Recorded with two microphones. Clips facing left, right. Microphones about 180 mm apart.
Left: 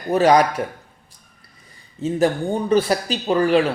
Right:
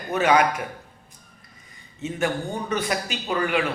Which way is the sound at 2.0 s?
30° left (ahead or behind).